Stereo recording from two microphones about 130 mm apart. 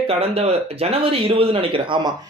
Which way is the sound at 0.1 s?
50° right (ahead or behind).